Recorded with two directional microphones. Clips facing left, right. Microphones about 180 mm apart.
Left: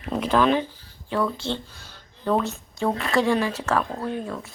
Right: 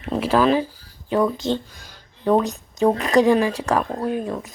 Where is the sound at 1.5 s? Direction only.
15° right (ahead or behind).